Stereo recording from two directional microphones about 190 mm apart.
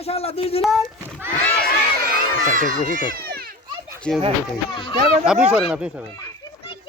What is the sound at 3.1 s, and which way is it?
Children playing, 55° right (ahead or behind).